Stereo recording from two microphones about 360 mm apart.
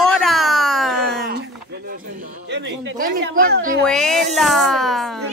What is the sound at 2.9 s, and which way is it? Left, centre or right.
Speech, right.